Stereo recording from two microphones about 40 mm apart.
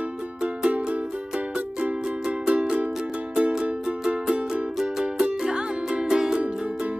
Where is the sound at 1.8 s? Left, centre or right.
Right.